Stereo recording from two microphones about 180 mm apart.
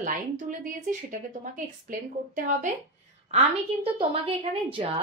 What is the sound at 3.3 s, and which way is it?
A woman's voice, 35° right (ahead or behind).